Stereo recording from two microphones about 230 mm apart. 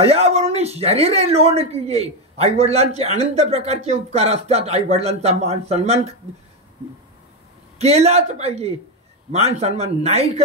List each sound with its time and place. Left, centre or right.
0.0 s speech: right
7.8 s speech: right